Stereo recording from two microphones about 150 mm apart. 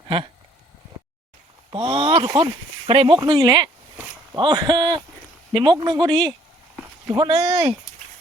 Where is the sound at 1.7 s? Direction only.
35° right (ahead or behind).